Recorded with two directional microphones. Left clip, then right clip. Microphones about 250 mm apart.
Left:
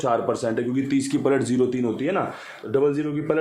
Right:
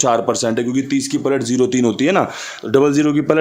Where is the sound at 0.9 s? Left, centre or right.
Centre.